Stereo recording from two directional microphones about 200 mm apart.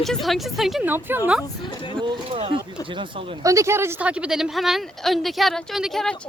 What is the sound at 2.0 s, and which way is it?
Speech, 30° right (ahead or behind).